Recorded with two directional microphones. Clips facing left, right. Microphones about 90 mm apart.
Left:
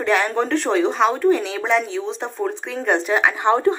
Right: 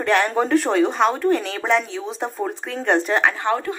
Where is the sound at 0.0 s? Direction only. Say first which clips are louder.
Even; centre (ahead or behind).